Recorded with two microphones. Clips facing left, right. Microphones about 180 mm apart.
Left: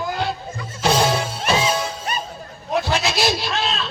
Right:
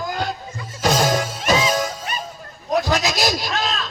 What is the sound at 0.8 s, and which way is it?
Music, 45° right (ahead or behind).